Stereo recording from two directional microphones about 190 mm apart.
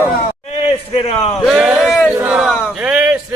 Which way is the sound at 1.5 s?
5° right (ahead or behind).